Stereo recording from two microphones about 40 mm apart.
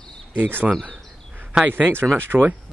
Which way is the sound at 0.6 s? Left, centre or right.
Right.